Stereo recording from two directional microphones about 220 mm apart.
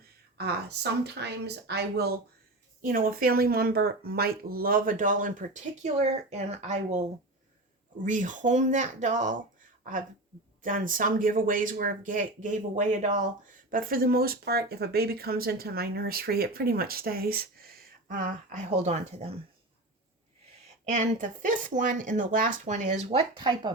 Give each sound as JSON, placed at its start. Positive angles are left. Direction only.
{"t": 0.3, "sound": "speech", "side_deg": -50}
{"t": 8.0, "sound": "speech", "side_deg": -35}
{"t": 10.6, "sound": "speech", "side_deg": -40}
{"t": 20.8, "sound": "speech", "side_deg": -35}